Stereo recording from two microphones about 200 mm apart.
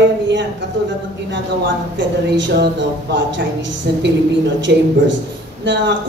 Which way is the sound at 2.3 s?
60° right (ahead or behind).